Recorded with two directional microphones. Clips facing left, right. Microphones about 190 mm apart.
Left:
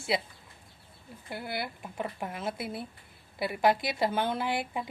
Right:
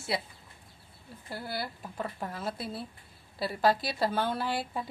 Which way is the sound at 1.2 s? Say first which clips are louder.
Left 1 dB; 20° left (ahead or behind).